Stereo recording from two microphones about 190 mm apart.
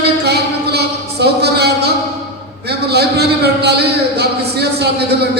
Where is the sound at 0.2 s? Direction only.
60° right (ahead or behind).